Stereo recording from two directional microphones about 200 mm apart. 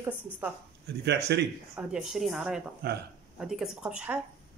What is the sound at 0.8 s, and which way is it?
Speech, 55° right (ahead or behind).